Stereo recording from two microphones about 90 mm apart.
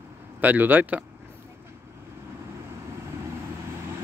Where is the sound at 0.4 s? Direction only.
20° right (ahead or behind).